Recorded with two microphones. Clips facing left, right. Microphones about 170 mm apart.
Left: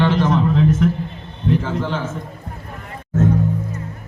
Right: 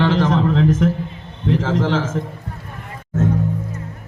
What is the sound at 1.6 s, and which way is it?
Speech, 90° right.